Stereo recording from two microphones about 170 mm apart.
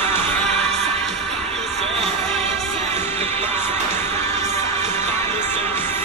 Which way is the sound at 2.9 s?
15° left (ahead or behind).